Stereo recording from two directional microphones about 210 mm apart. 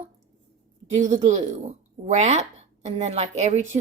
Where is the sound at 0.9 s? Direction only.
35° right (ahead or behind).